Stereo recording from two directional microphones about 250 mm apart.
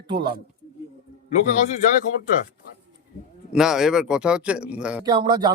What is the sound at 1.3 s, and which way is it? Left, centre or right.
Speech, left.